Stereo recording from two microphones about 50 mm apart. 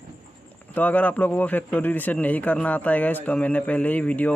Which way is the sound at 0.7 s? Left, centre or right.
Left.